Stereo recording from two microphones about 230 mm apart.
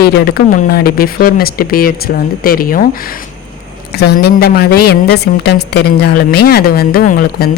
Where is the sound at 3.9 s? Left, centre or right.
Left.